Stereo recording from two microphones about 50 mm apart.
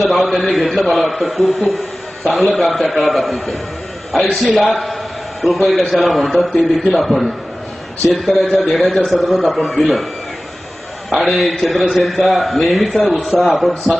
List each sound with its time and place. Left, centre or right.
0.3 s a man's voice: centre
11.1 s a man's voice: centre